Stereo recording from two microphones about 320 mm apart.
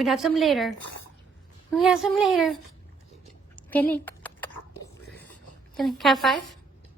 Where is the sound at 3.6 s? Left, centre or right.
Centre.